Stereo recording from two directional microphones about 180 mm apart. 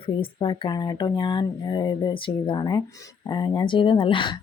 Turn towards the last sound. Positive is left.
turn(degrees=30)  # may be behind; listen again after turning